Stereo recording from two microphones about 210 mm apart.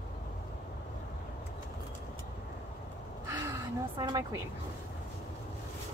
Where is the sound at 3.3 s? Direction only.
15° right (ahead or behind).